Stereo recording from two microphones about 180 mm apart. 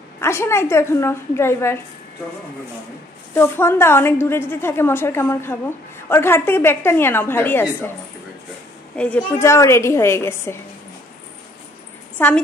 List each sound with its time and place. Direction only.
0.2 s a woman's voice: 15° left (ahead or behind)
3.3 s a woman's voice: 15° left (ahead or behind)
8.9 s a woman's voice: 5° left (ahead or behind)
12.2 s a woman's voice: 10° left (ahead or behind)